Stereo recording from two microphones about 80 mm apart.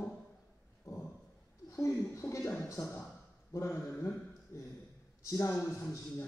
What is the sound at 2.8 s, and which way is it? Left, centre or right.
Speech, left.